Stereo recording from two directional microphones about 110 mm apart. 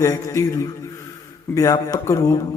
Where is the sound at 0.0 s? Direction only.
25° left (ahead or behind).